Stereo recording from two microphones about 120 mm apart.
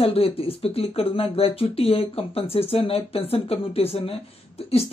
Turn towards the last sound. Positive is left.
turn(degrees=55)  # may be behind; listen again after turning